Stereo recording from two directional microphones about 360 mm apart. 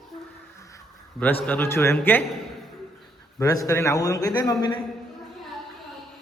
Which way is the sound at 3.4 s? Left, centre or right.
Centre.